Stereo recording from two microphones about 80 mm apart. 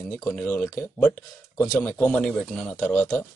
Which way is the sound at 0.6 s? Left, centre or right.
Left.